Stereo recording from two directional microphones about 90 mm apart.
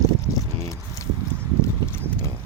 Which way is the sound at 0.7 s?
35° left (ahead or behind).